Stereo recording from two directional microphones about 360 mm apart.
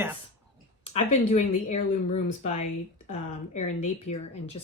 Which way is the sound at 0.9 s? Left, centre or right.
Centre.